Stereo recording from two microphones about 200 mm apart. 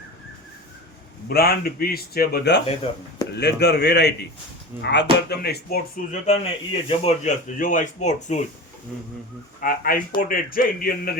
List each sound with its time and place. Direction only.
1.3 s speech: 50° left (ahead or behind)
2.6 s speech: 30° left (ahead or behind)
3.3 s a man's voice: 55° left (ahead or behind)
6.1 s speech: 35° left (ahead or behind)
7.6 s speech: 40° left (ahead or behind)
9.6 s speech: 45° left (ahead or behind)